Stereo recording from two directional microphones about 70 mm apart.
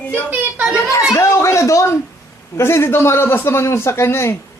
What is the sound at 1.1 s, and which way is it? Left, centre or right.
A child's voice, left.